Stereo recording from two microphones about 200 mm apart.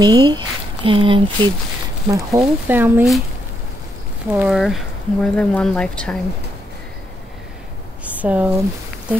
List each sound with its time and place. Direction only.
0.0 s speech: 20° right (ahead or behind)
4.3 s speech: 5° right (ahead or behind)
8.0 s a sound: 5° right (ahead or behind)